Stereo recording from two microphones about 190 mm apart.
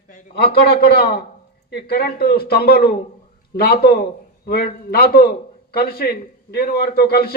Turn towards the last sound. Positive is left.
turn(degrees=55)  # may be behind; listen again after turning